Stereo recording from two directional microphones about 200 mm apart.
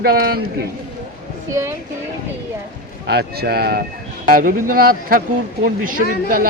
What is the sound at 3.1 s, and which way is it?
Speech, 55° right (ahead or behind).